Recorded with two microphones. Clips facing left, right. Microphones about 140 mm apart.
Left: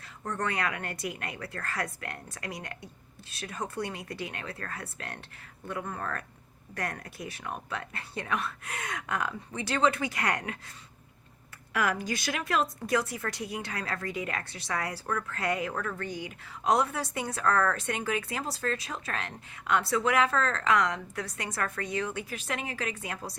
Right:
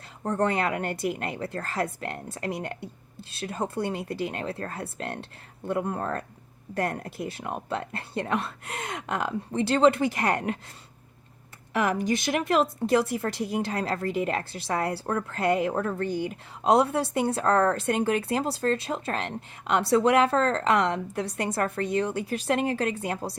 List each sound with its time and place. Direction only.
0.2 s speech: 30° right (ahead or behind)
11.7 s a woman's voice: 25° right (ahead or behind)